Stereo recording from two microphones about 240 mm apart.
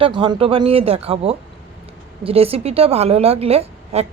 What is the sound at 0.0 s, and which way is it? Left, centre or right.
A woman's voice, centre.